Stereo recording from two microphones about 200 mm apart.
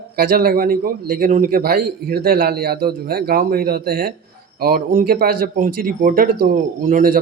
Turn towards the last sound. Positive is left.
turn(degrees=-45)  # may be behind; listen again after turning